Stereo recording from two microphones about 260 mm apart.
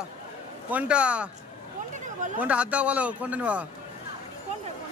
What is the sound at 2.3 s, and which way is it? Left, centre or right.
A man's voice, centre.